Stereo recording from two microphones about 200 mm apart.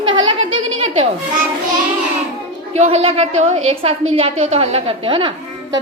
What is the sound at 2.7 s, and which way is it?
A woman's voice, 30° right (ahead or behind).